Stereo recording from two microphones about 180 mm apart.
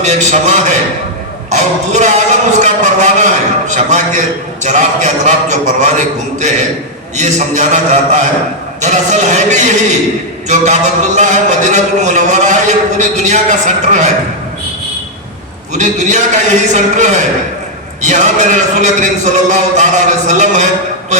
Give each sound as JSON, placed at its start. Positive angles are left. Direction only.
{"t": 0.0, "sound": "a man's voice", "side_deg": -40}
{"t": 7.2, "sound": "a man's voice", "side_deg": -40}
{"t": 15.7, "sound": "a man's voice", "side_deg": -40}